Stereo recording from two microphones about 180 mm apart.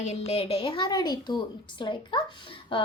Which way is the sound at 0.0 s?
35° left (ahead or behind).